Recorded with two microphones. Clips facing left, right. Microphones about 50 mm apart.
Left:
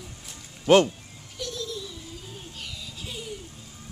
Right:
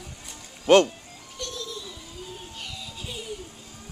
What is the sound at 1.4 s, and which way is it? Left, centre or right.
Baby laughter, centre.